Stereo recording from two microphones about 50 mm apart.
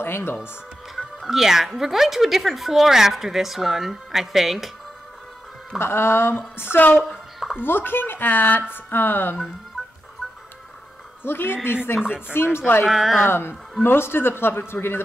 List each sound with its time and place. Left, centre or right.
0.0 s a woman's voice: left
0.9 s speech: centre
5.8 s a woman's voice: left
11.2 s a woman's voice: left
12.0 s speech: centre
12.4 s a woman's voice: left
12.9 s speech: centre
13.3 s a woman's voice: left